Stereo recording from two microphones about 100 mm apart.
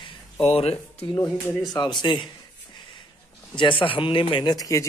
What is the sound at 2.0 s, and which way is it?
Speech, 50° left (ahead or behind).